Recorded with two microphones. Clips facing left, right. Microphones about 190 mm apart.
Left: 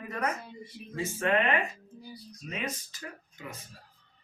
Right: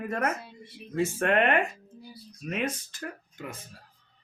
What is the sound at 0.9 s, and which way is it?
Speech, 60° right (ahead or behind).